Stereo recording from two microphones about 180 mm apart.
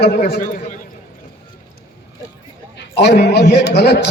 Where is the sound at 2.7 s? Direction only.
70° left (ahead or behind).